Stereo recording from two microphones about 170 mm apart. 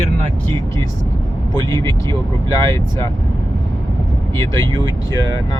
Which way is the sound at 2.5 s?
20° left (ahead or behind).